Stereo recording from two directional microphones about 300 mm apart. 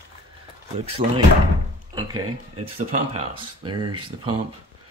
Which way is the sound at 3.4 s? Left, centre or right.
Centre.